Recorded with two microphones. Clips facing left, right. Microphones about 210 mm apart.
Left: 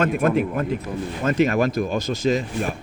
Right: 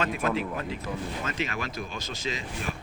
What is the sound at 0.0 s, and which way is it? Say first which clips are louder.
Speech: left 8 dB; 55° left (ahead or behind).